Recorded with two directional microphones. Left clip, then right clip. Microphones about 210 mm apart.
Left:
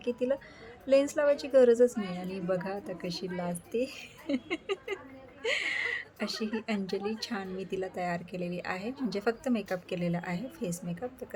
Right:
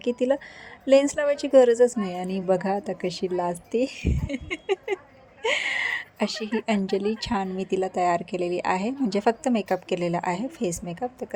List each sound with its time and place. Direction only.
0.0 s a woman's voice: 25° right (ahead or behind)